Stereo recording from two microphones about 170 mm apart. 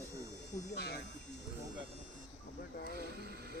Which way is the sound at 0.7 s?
70° left (ahead or behind).